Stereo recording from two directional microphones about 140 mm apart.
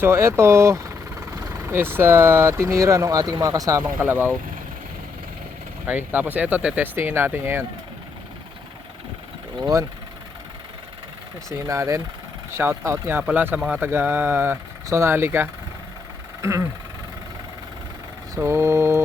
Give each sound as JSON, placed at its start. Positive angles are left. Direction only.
{"t": 0.0, "sound": "speech", "side_deg": -20}
{"t": 5.9, "sound": "speech", "side_deg": -15}
{"t": 11.4, "sound": "speech", "side_deg": -20}
{"t": 18.3, "sound": "mantra", "side_deg": -20}